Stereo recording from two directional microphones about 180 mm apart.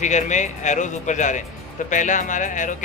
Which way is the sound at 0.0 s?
40° left (ahead or behind).